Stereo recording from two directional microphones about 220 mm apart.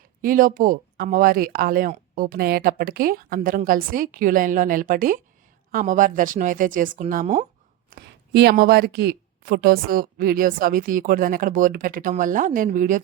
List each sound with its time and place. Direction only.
0.2 s speech: 40° right (ahead or behind)
7.9 s speech: 50° right (ahead or behind)